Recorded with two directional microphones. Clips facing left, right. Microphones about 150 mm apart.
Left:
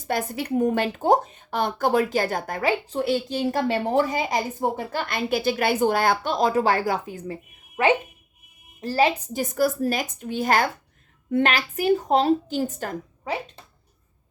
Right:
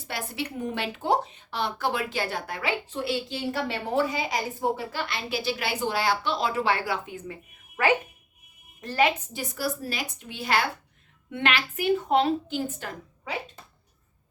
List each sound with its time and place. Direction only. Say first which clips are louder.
0.1 s speech: left 8 dB; 45° left (ahead or behind)
8.8 s a woman's voice: left 3 dB; 35° left (ahead or behind)